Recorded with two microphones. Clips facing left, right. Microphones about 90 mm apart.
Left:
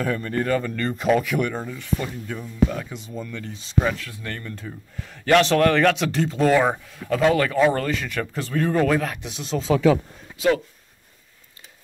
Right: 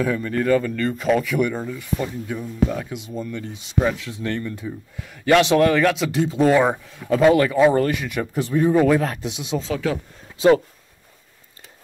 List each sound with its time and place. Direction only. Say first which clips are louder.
0.0 s speech: right 3 dB; centre (ahead or behind)
4.0 s speech: right 7 dB; 25° right (ahead or behind)
4.6 s speech: right 4 dB; 10° right (ahead or behind)
9.0 s speech: right 4 dB; 30° right (ahead or behind)
9.3 s speech: right 2 dB; 15° right (ahead or behind)